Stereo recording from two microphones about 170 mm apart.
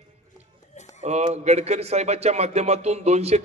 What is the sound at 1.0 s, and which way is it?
Speech, 40° right (ahead or behind).